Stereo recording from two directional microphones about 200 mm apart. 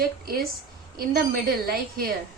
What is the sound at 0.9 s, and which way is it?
Speech, 45° right (ahead or behind).